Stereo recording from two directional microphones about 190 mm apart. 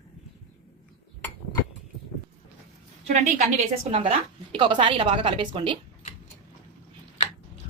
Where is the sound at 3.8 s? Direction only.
30° right (ahead or behind).